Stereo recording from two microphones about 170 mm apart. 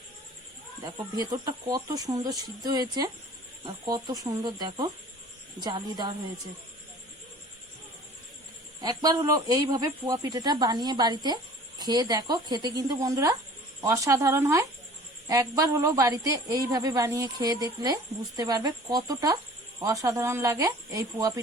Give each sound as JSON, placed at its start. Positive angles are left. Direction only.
{"t": 0.9, "sound": "a woman's voice", "side_deg": -25}
{"t": 8.8, "sound": "a woman's voice", "side_deg": -20}